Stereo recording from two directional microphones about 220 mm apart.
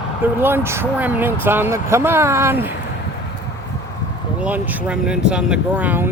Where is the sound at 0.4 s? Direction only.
10° right (ahead or behind).